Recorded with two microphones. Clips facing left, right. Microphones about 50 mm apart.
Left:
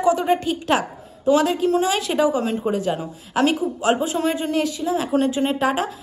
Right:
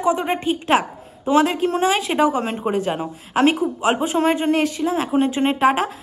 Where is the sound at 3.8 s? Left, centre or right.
Right.